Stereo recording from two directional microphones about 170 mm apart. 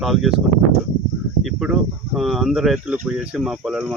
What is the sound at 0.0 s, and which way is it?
Speech, centre (ahead or behind).